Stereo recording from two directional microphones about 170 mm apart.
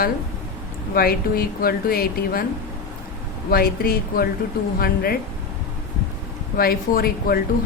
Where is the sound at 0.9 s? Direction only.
60° left (ahead or behind).